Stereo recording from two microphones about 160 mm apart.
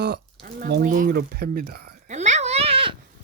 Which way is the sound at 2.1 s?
45° right (ahead or behind).